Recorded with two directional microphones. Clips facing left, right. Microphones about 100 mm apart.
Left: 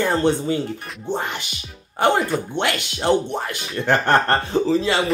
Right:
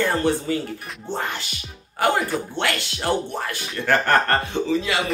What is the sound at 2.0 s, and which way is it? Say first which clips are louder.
Speech: left 3 dB; 25° left (ahead or behind).